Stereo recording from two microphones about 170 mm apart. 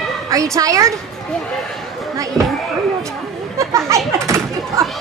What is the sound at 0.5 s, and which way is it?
Speech, 20° right (ahead or behind).